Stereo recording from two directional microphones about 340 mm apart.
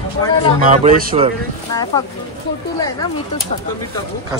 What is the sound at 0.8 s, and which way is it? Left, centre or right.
Speech, centre.